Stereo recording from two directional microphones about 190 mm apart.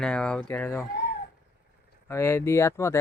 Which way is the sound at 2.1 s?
15° left (ahead or behind).